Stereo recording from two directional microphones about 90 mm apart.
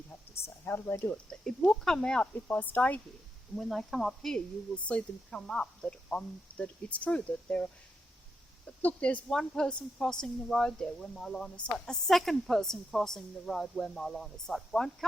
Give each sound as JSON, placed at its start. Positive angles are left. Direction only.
{"t": 0.1, "sound": "a sound", "side_deg": 25}
{"t": 1.1, "sound": "speech", "side_deg": 10}
{"t": 3.5, "sound": "speech", "side_deg": 0}
{"t": 8.8, "sound": "speech", "side_deg": 15}